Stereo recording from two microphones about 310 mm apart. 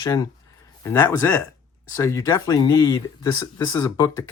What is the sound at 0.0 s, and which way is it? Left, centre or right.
Speech, centre.